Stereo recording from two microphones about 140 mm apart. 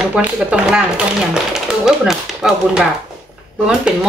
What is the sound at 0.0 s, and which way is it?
A woman's voice, 10° right (ahead or behind).